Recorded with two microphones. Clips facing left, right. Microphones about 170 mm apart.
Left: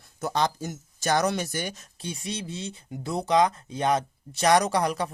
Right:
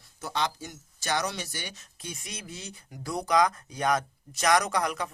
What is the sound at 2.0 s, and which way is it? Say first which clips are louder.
Speech: left 7 dB; 30° left (ahead or behind).